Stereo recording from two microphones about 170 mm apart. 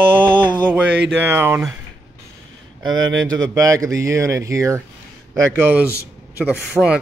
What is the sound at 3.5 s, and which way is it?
Speech, 20° right (ahead or behind).